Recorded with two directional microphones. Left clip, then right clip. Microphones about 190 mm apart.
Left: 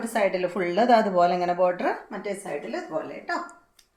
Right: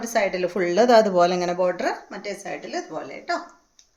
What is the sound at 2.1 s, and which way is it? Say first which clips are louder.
Speech: even; 30° right (ahead or behind).